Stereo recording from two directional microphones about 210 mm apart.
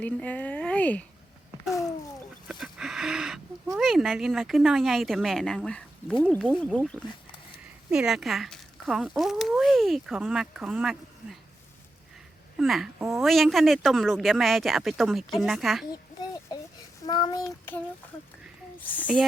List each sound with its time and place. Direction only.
0.0 s speech: 5° left (ahead or behind)
2.5 s a sound: centre (ahead or behind)
3.8 s speech: centre (ahead or behind)
12.5 s speech: centre (ahead or behind)
17.1 s child singing: 20° left (ahead or behind)
17.4 s speech: 5° left (ahead or behind)